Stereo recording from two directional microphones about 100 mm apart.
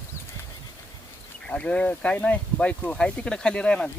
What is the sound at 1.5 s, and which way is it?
Speech, 10° left (ahead or behind).